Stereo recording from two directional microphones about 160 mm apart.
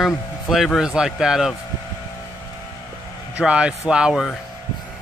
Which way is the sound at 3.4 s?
5° right (ahead or behind).